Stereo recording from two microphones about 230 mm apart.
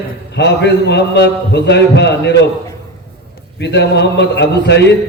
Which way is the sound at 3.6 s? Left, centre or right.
Left.